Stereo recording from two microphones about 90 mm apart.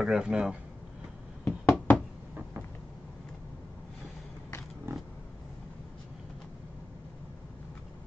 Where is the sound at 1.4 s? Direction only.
15° left (ahead or behind).